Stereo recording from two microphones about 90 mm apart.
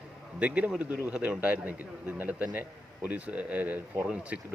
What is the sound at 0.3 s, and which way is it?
A man's voice, 15° right (ahead or behind).